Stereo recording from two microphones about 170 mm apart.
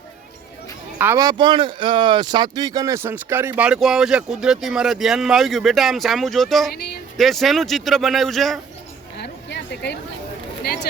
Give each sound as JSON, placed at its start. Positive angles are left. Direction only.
{"t": 0.9, "sound": "speech", "side_deg": -10}
{"t": 1.2, "sound": "speech", "side_deg": -25}
{"t": 6.7, "sound": "speech", "side_deg": 65}
{"t": 7.2, "sound": "speech", "side_deg": 0}
{"t": 9.1, "sound": "a sound", "side_deg": 85}